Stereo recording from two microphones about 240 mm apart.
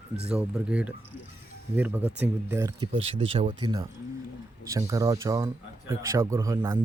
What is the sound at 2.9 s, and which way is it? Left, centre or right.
Speech, right.